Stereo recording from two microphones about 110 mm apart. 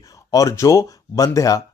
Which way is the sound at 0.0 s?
30° left (ahead or behind).